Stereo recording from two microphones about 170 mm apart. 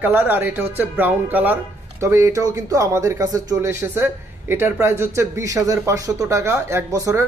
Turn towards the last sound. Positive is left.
turn(degrees=-15)  # may be behind; listen again after turning